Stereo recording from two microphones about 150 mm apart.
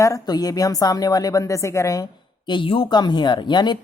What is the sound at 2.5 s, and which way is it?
Speech, 35° left (ahead or behind).